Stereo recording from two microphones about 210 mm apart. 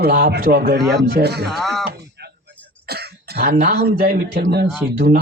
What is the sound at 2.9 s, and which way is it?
Cough, 50° right (ahead or behind).